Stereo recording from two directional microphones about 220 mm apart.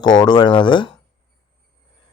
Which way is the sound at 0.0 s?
20° left (ahead or behind).